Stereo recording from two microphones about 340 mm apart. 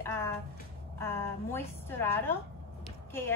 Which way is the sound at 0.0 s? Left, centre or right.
Centre.